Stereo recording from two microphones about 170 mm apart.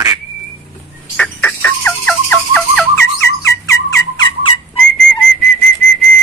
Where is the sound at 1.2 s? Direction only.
10° left (ahead or behind).